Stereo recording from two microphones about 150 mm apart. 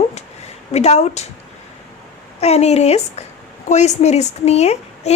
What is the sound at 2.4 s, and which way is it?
A woman's voice, 45° left (ahead or behind).